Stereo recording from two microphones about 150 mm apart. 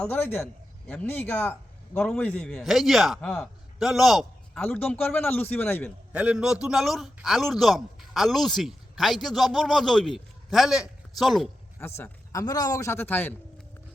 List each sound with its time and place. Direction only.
0.0 s a man's voice: 10° left (ahead or behind)
4.6 s speech: 10° left (ahead or behind)
6.1 s a man's voice: 5° right (ahead or behind)
11.8 s speech: 15° left (ahead or behind)